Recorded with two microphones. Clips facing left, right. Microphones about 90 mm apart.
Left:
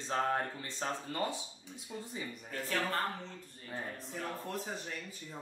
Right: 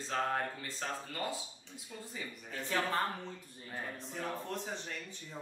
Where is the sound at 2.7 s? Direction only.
5° right (ahead or behind).